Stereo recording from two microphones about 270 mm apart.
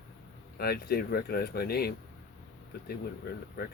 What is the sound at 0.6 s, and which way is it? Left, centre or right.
Speech, left.